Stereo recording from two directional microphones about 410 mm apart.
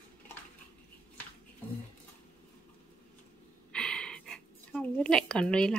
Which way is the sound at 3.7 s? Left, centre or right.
Centre.